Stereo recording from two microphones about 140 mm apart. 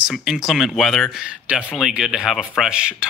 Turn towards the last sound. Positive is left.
turn(degrees=-5)  # may be behind; listen again after turning